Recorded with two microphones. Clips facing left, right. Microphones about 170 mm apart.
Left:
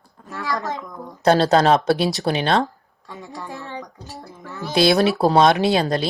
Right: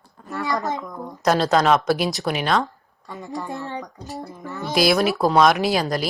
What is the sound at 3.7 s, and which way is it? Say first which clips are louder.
Speech: right 2 dB; centre (ahead or behind).